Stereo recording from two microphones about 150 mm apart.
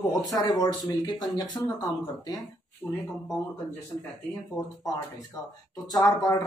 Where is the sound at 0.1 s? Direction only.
25° left (ahead or behind).